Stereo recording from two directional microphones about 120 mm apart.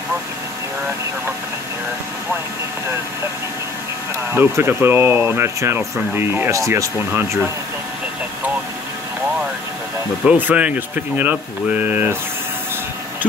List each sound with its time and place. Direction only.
4.3 s speech: 20° right (ahead or behind)
10.2 s speech: 10° right (ahead or behind)